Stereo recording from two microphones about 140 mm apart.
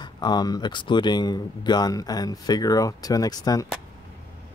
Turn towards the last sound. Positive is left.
turn(degrees=25)  # may be behind; listen again after turning